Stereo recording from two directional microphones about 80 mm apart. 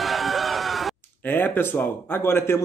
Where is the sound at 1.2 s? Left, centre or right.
Left.